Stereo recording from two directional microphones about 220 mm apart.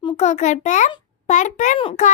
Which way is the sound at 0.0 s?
25° left (ahead or behind).